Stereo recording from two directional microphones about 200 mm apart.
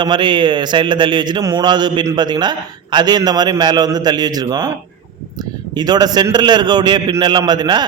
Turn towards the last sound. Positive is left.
turn(degrees=-20)  # may be behind; listen again after turning